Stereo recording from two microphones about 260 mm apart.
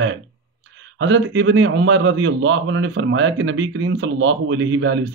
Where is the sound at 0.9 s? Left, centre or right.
Right.